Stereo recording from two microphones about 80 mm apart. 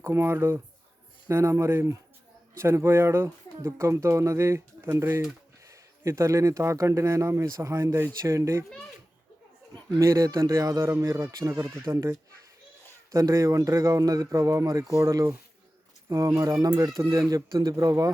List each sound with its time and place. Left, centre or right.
0.0 s speech: right
10.0 s speech: right
13.1 s speech: right
16.6 s speech: right